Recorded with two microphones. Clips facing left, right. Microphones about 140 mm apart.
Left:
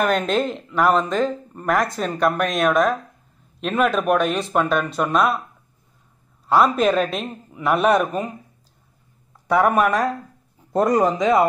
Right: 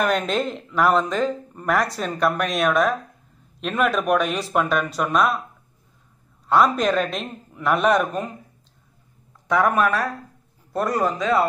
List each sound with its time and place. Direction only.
0.0 s speech: centre (ahead or behind)
6.5 s speech: centre (ahead or behind)
9.5 s a man's voice: 15° left (ahead or behind)